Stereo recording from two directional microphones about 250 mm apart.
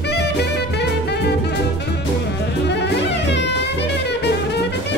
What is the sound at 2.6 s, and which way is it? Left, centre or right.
Music, left.